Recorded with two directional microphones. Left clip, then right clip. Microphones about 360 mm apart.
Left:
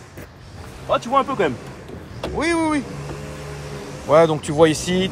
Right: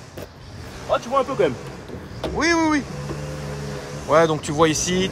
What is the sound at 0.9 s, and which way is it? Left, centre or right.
Speech, centre.